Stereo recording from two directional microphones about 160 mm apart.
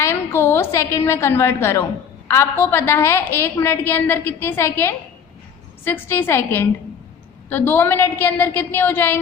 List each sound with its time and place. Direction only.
0.0 s a woman's voice: 15° left (ahead or behind)